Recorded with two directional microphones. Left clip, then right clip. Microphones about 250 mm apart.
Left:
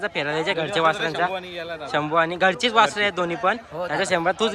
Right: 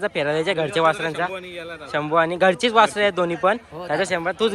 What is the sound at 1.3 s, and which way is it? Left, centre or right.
Speech, left.